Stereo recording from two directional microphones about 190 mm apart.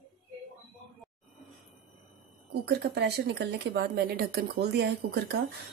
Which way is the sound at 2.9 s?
60° right (ahead or behind).